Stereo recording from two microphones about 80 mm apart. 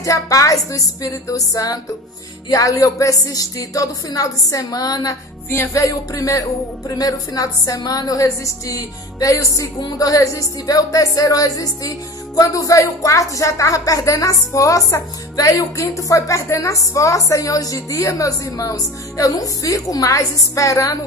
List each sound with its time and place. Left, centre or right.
0.0 s a woman's voice: left
5.5 s music: left
5.8 s a woman's voice: left